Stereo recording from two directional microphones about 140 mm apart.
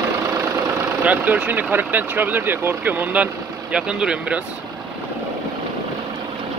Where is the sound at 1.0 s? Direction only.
10° right (ahead or behind).